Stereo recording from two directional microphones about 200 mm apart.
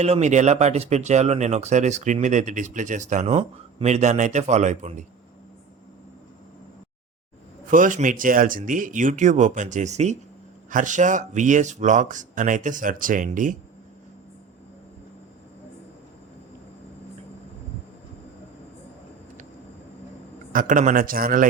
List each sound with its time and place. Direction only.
0.0 s speech: 35° right (ahead or behind)
7.7 s speech: 40° right (ahead or behind)
20.5 s a man's voice: 40° right (ahead or behind)